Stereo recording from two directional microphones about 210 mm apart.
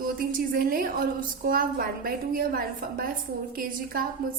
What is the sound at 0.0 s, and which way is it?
A woman's voice, 45° right (ahead or behind).